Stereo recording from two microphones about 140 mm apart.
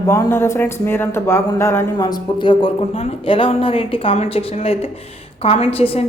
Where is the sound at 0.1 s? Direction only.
20° left (ahead or behind).